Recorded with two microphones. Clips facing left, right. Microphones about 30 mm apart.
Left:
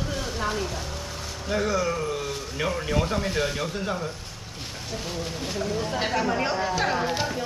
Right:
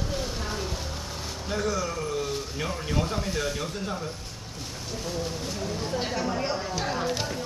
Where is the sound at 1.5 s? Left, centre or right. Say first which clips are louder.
Left 4 dB; centre.